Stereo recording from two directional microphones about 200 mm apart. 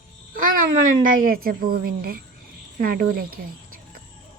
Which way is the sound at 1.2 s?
45° right (ahead or behind).